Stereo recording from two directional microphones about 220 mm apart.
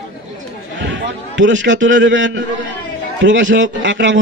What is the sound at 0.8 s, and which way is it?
A man's voice, 55° right (ahead or behind).